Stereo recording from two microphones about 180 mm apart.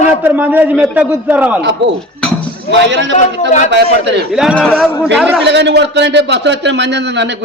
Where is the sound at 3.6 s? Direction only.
75° right (ahead or behind).